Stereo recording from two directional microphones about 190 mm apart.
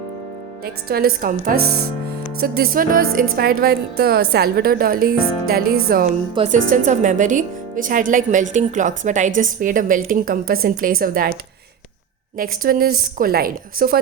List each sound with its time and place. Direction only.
0.6 s speech: 55° right (ahead or behind)
6.3 s speech: 30° right (ahead or behind); by 11.3 s 50° right (ahead or behind)
12.4 s speech: 50° right (ahead or behind)